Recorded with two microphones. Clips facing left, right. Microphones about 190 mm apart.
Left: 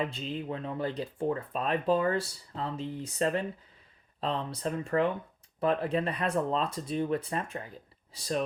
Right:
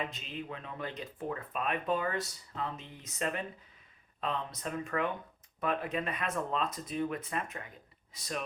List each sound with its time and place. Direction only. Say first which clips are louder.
0.0 s speech: left 6 dB; 30° left (ahead or behind)